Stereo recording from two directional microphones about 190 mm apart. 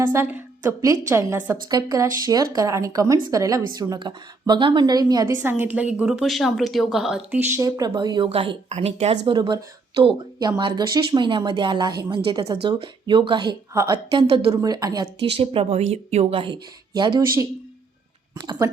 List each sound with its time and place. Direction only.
0.0 s a woman's voice: 15° right (ahead or behind)